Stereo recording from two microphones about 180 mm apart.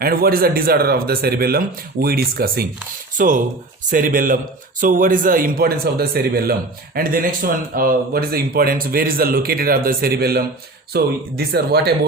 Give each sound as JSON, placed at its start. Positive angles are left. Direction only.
{"t": 0.0, "sound": "a man's voice", "side_deg": -55}
{"t": 3.2, "sound": "a man's voice", "side_deg": -45}